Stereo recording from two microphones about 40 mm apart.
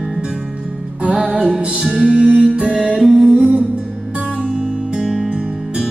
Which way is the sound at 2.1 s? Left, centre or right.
Right.